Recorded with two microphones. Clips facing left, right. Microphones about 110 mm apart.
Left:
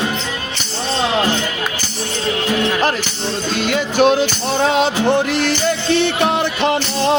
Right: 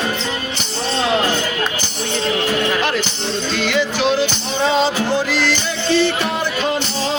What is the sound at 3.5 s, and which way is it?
Music, 45° left (ahead or behind).